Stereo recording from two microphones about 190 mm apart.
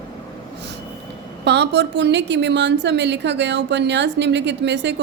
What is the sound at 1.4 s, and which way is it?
A woman's voice, 65° right (ahead or behind).